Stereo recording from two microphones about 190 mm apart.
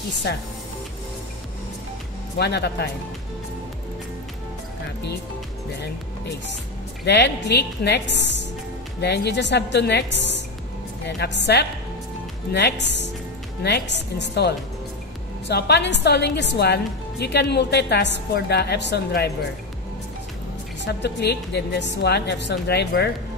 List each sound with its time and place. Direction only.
0.3 s a woman's voice: 60° left (ahead or behind)
2.3 s a woman's voice: 60° left (ahead or behind)
7.1 s a woman's voice: 65° left (ahead or behind)
20.8 s a woman's voice: 60° left (ahead or behind)